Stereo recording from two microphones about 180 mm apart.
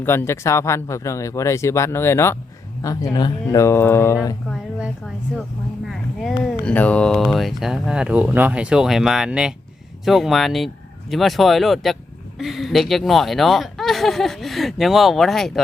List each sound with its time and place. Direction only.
0.0 s speech: 10° left (ahead or behind)
4.4 s speech: centre (ahead or behind)